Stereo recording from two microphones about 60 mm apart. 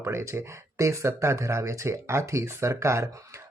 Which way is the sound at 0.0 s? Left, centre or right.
Right.